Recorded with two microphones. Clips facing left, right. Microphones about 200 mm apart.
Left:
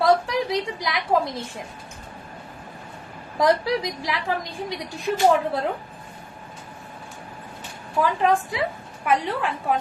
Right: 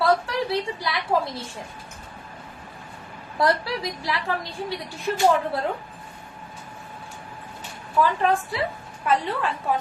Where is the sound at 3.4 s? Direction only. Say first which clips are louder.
Left 3 dB; 15° left (ahead or behind).